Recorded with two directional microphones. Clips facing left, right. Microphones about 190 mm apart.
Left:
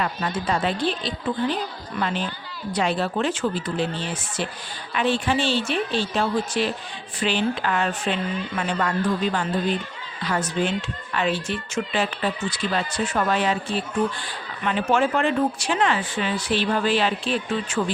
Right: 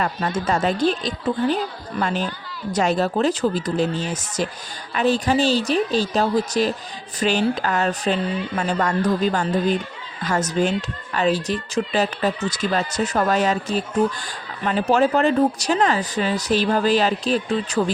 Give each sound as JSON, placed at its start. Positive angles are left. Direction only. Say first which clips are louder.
{"t": 0.0, "sound": "a woman's voice", "louder": "right 3 dB", "side_deg": -45}